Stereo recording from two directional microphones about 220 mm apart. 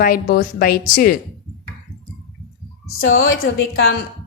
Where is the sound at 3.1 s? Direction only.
60° left (ahead or behind).